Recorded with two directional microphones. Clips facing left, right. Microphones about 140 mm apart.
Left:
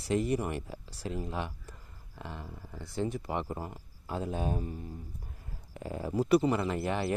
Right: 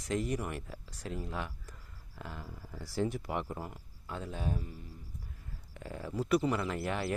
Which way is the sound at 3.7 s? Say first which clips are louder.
Left 5 dB; 35° left (ahead or behind).